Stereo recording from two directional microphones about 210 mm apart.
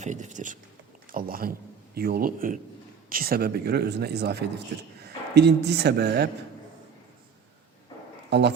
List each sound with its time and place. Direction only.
0.0 s speech: 35° right (ahead or behind); by 6.3 s 50° right (ahead or behind)
8.3 s speech: 55° right (ahead or behind)